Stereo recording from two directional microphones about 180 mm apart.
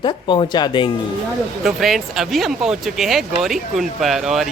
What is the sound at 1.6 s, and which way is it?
Speech, centre (ahead or behind).